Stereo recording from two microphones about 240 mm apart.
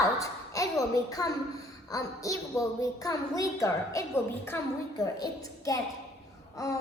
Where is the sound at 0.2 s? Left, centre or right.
Centre.